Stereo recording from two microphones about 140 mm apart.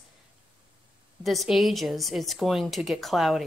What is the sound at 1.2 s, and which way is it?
A woman's voice, centre (ahead or behind).